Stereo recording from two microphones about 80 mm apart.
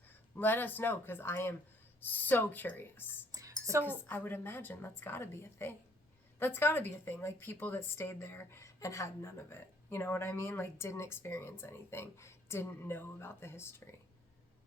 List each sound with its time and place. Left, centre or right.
0.1 s a woman's voice: left
3.3 s a sound: right
4.0 s a woman's voice: left